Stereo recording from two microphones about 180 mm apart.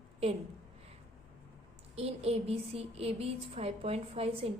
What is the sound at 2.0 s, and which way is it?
A woman's voice, 35° right (ahead or behind).